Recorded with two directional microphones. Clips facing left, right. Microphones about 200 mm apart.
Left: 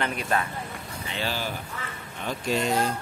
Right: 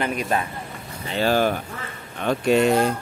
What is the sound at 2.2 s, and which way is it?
Speech, 65° right (ahead or behind).